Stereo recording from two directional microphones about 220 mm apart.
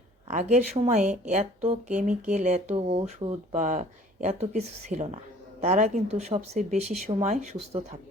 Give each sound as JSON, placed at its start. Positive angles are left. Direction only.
{"t": 0.3, "sound": "speech", "side_deg": -30}